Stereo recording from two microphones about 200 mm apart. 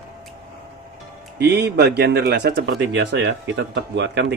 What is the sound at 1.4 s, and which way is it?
Speech, 55° right (ahead or behind).